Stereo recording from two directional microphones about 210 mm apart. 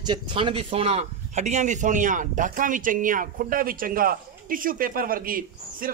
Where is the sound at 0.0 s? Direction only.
25° right (ahead or behind).